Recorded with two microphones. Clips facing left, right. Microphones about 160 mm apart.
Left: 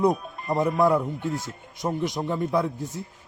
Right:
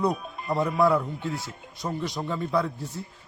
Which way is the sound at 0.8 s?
20° left (ahead or behind).